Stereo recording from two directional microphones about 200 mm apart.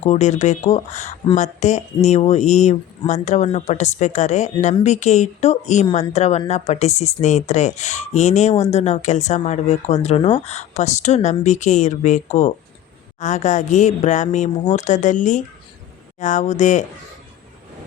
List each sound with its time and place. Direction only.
0.0 s speech: 35° left (ahead or behind)